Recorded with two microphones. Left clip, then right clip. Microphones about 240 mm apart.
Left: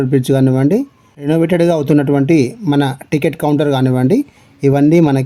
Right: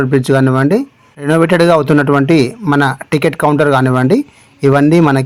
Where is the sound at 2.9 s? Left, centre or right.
Right.